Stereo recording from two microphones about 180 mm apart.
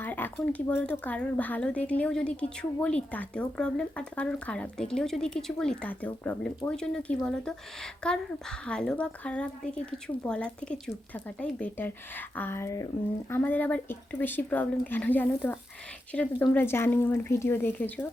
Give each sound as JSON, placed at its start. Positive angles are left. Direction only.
{"t": 0.0, "sound": "speech", "side_deg": 10}